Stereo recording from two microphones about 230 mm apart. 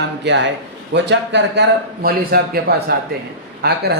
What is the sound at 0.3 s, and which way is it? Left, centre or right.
Speech, right.